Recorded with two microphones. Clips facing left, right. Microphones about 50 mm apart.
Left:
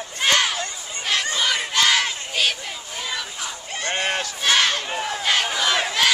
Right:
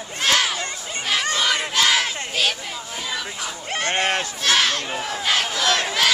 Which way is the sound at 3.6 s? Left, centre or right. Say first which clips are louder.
Right 3 dB; right.